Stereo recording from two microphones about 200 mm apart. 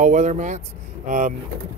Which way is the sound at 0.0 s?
35° right (ahead or behind).